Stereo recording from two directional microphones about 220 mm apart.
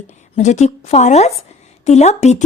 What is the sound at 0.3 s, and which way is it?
A woman's voice, 30° left (ahead or behind).